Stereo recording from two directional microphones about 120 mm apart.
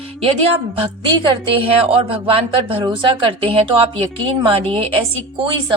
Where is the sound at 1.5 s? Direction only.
50° right (ahead or behind).